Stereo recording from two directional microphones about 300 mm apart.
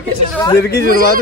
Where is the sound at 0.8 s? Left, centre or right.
Right.